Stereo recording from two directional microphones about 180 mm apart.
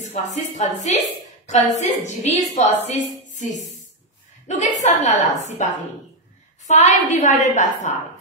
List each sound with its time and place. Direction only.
0.0 s a woman's voice: 40° left (ahead or behind)
6.7 s a woman's voice: 40° left (ahead or behind)